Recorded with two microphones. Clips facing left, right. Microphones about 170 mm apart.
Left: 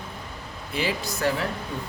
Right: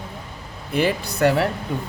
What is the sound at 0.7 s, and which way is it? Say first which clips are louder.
Speech: right 6 dB; 55° right (ahead or behind).